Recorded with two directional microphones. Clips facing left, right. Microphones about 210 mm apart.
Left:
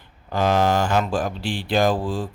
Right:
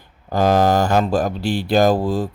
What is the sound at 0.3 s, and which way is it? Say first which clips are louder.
Speech: right 4 dB; 40° right (ahead or behind).